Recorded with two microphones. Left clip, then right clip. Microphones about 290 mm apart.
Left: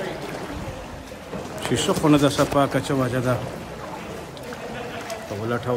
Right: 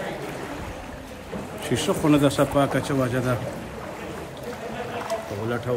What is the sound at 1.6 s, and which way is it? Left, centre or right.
Speech, centre.